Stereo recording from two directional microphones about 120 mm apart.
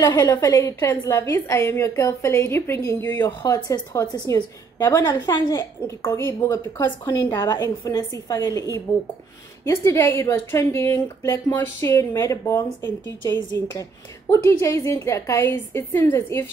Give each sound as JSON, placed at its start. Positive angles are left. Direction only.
{"t": 0.0, "sound": "a woman's voice", "side_deg": 30}
{"t": 7.8, "sound": "a woman's voice", "side_deg": 40}
{"t": 8.4, "sound": "a woman's voice", "side_deg": 30}
{"t": 13.4, "sound": "a woman's voice", "side_deg": 35}
{"t": 14.3, "sound": "a woman's voice", "side_deg": 25}